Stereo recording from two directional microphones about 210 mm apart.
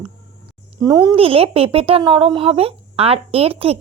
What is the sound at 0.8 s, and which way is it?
Speech, 20° right (ahead or behind).